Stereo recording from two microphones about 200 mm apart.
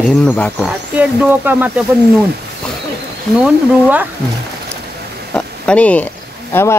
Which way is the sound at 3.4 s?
10° right (ahead or behind).